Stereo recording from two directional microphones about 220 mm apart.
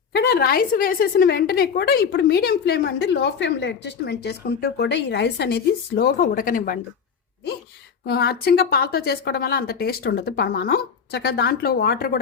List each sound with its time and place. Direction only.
0.1 s a woman's voice: 45° left (ahead or behind)
8.0 s a woman's voice: 45° left (ahead or behind)